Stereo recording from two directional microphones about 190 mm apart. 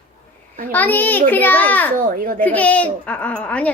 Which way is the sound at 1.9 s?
50° right (ahead or behind).